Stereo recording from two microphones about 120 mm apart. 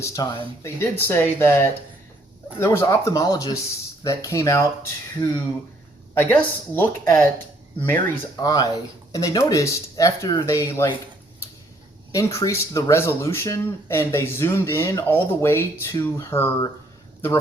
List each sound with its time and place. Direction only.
0.0 s speech: 30° left (ahead or behind)
0.6 s speech: 20° left (ahead or behind)
8.4 s speech: 30° left (ahead or behind)
12.1 s speech: 25° left (ahead or behind)